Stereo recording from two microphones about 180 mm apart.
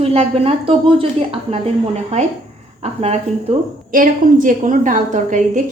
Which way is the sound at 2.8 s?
35° right (ahead or behind).